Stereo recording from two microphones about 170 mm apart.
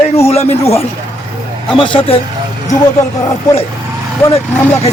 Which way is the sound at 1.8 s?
30° left (ahead or behind).